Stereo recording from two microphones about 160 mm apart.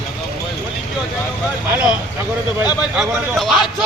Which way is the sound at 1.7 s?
5° right (ahead or behind).